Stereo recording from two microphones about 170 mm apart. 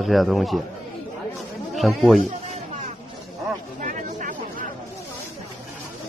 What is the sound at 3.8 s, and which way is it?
Chatter, 50° right (ahead or behind).